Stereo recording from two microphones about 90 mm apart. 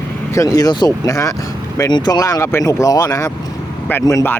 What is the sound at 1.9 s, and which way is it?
Speech, 50° left (ahead or behind).